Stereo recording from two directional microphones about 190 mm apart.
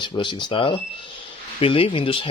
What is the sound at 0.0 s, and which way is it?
Speech, 25° left (ahead or behind).